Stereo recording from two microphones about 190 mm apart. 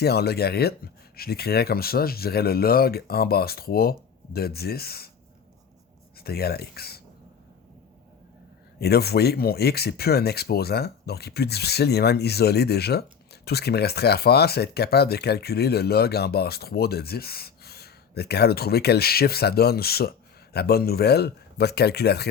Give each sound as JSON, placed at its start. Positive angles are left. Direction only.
{"t": 0.0, "sound": "speech", "side_deg": 55}
{"t": 6.1, "sound": "speech", "side_deg": 55}
{"t": 8.8, "sound": "speech", "side_deg": 55}